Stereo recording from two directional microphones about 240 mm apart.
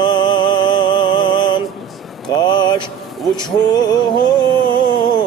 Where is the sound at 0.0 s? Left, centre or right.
Centre.